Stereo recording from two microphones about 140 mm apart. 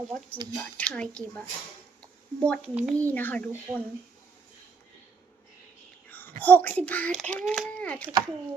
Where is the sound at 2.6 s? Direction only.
5° right (ahead or behind).